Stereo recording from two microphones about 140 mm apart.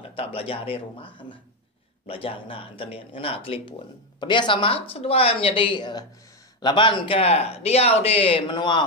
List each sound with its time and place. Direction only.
0.0 s speech: 40° left (ahead or behind)